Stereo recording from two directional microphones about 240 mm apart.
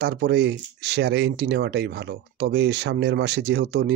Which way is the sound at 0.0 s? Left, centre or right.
Right.